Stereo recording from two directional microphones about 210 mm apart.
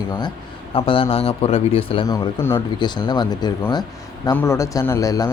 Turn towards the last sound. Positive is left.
turn(degrees=15)  # may be behind; listen again after turning